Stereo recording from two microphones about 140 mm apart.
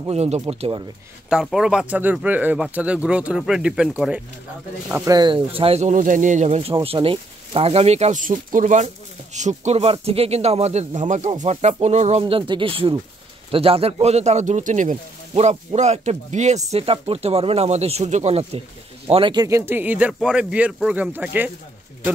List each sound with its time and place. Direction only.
0.1 s speech: 50° right (ahead or behind)
1.3 s speech: 5° right (ahead or behind)
5.0 s speech: 30° right (ahead or behind); by 6.7 s 55° right (ahead or behind)
6.7 s speech: 40° right (ahead or behind)
8.2 s speech: 75° right (ahead or behind); by 10.9 s 50° right (ahead or behind)
11.0 s speech: 60° right (ahead or behind)
12.2 s speech: 40° right (ahead or behind)
19.4 s speech: 20° right (ahead or behind)